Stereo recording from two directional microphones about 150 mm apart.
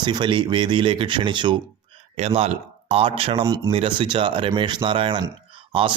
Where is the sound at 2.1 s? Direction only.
45° right (ahead or behind).